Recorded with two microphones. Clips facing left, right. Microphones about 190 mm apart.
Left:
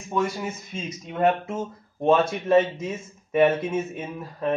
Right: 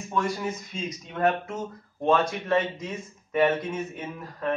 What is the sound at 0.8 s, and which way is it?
Speech, 25° left (ahead or behind).